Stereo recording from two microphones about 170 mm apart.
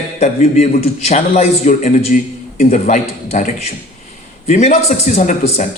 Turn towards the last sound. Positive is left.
turn(degrees=45)  # may be behind; listen again after turning